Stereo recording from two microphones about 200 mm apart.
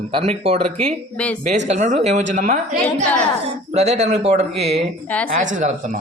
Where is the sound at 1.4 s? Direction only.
35° right (ahead or behind).